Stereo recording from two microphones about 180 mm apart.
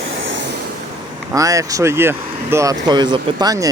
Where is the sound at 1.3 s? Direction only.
20° right (ahead or behind).